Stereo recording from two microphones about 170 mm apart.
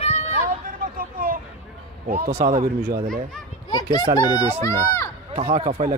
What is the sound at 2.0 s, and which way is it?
Speech, 45° right (ahead or behind).